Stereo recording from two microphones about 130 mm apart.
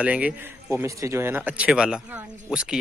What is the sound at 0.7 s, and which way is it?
A woman's voice, 25° right (ahead or behind).